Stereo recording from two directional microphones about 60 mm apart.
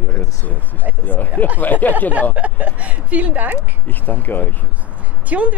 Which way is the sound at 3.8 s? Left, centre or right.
Left.